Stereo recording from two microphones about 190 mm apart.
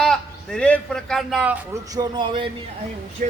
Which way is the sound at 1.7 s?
20° right (ahead or behind).